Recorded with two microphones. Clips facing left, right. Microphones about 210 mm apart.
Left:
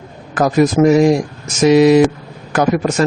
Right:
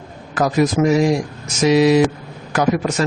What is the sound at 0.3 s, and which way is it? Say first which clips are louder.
A man's voice: left 4 dB; 50° left (ahead or behind).